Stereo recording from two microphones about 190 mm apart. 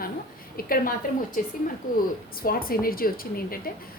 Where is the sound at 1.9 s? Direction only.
50° left (ahead or behind).